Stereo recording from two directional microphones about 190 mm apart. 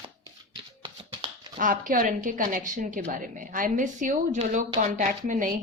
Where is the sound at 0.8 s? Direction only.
25° right (ahead or behind).